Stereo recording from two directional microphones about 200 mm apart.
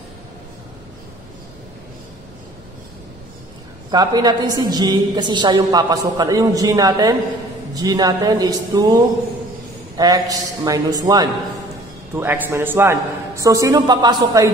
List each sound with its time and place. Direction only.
3.9 s a man's voice: 20° right (ahead or behind)
9.9 s a man's voice: 20° right (ahead or behind)